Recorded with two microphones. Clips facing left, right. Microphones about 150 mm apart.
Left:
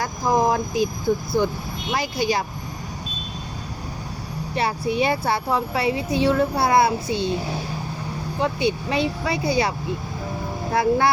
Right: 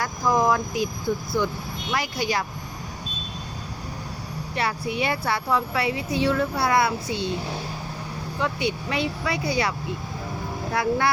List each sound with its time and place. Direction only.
0.0 s a woman's voice: 30° left (ahead or behind)
1.9 s a woman's voice: 25° left (ahead or behind)
4.5 s a woman's voice: 30° left (ahead or behind)
8.4 s a woman's voice: 30° left (ahead or behind)
10.8 s a woman's voice: 30° left (ahead or behind)